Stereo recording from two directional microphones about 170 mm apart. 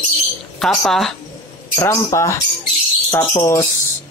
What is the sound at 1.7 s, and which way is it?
Speech, 15° left (ahead or behind).